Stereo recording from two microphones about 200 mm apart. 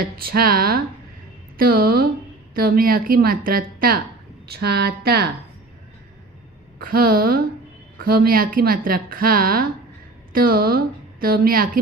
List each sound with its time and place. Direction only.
0.0 s a woman's voice: 50° right (ahead or behind)
6.7 s a woman's voice: 45° right (ahead or behind)